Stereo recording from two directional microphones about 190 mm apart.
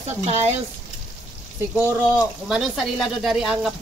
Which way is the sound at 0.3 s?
35° right (ahead or behind).